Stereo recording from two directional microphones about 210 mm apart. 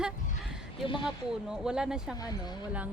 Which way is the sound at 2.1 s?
20° left (ahead or behind).